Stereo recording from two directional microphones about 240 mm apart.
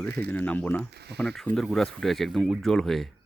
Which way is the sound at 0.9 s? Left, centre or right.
Right.